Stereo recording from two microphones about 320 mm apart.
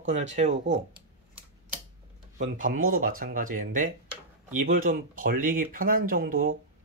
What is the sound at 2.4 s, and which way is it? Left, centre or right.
Speech, right.